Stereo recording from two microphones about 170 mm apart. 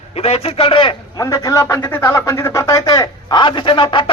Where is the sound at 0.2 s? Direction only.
35° left (ahead or behind).